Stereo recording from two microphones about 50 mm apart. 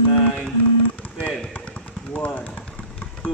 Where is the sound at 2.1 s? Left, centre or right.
Left.